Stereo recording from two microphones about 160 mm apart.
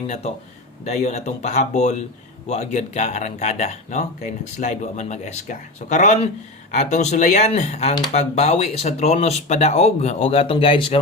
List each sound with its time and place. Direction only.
0.1 s speech: 40° left (ahead or behind)